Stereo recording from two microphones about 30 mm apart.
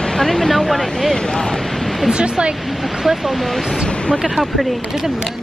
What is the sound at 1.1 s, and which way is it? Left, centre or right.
Speech, centre.